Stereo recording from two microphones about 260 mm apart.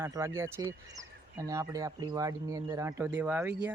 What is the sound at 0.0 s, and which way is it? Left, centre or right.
Speech, centre.